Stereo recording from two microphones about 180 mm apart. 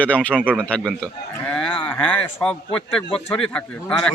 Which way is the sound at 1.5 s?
5° left (ahead or behind).